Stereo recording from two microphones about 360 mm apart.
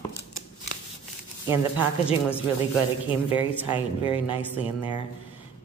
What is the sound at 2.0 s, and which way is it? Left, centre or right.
Speech, centre.